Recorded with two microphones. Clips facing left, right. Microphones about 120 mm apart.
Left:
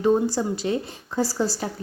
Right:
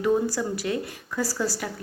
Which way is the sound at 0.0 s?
25° left (ahead or behind).